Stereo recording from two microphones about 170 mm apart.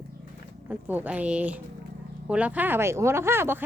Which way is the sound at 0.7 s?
10° right (ahead or behind).